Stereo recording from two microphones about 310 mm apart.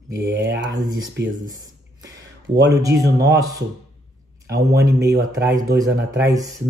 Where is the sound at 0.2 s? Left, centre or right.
Right.